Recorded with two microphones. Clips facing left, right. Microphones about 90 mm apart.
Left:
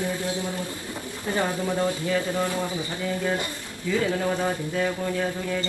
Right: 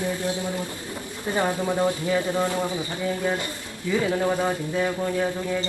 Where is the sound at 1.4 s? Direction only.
20° right (ahead or behind).